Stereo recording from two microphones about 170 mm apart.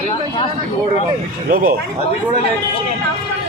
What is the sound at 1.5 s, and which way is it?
Speech, 55° right (ahead or behind).